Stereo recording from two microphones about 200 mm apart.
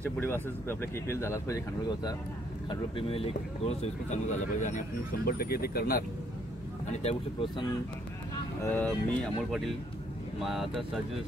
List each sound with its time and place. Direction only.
0.0 s speech: 10° left (ahead or behind)
2.7 s speech: 25° left (ahead or behind); by 6.0 s 50° left (ahead or behind)
6.9 s speech: 30° left (ahead or behind)
8.6 s speech: 5° left (ahead or behind)